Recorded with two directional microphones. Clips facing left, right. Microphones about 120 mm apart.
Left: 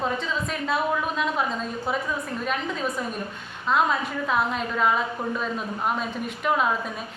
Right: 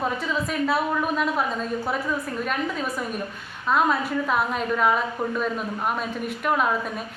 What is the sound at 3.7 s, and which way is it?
A woman's voice, 5° right (ahead or behind).